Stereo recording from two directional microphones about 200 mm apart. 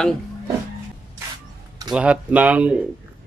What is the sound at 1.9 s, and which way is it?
Speech, 5° right (ahead or behind).